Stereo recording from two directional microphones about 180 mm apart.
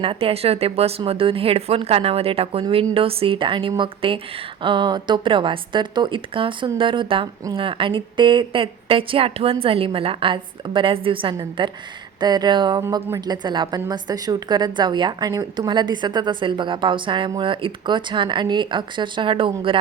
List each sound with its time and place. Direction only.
0.0 s a woman's voice: 30° right (ahead or behind)